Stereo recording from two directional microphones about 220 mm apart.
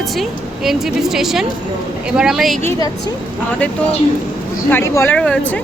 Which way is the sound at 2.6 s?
15° left (ahead or behind).